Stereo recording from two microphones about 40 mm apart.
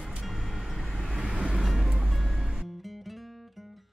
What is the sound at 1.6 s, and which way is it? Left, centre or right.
Music, centre.